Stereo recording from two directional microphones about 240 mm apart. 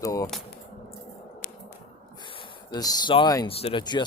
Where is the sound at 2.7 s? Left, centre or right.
Centre.